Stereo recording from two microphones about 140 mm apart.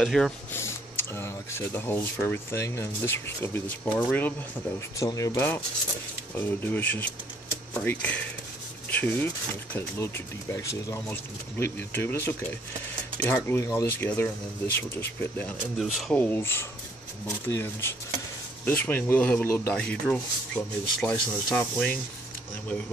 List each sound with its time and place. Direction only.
0.0 s speech: 5° left (ahead or behind)
0.5 s speech: 15° left (ahead or behind)
4.9 s speech: 25° left (ahead or behind)
15.8 s speech: centre (ahead or behind)
16.2 s speech: 15° left (ahead or behind)
19.7 s speech: 5° left (ahead or behind)